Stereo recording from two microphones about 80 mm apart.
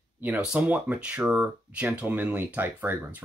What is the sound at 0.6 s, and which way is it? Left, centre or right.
Speech, centre.